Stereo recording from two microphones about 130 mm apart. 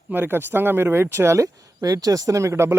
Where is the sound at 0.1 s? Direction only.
15° right (ahead or behind).